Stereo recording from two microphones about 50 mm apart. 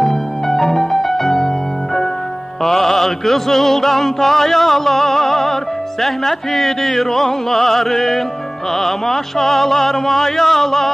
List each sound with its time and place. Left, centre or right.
0.0 s music: centre
2.6 s music: centre